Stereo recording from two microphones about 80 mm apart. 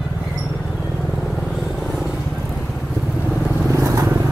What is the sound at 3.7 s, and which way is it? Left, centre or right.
Vehicle, right.